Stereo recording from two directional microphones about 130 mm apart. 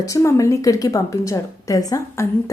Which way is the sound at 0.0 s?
25° left (ahead or behind).